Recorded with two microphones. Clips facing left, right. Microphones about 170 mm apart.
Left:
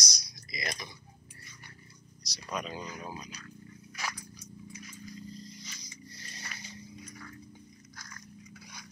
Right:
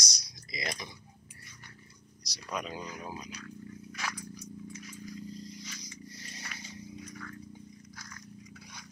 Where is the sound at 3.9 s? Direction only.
5° left (ahead or behind).